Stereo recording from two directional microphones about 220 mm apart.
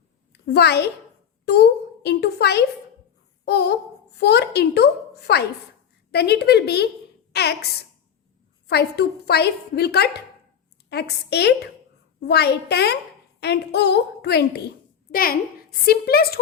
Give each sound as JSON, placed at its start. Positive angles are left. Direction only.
{"t": 0.4, "sound": "a woman's voice", "side_deg": 50}
{"t": 3.4, "sound": "a sound", "side_deg": 50}
{"t": 4.2, "sound": "a woman's voice", "side_deg": 50}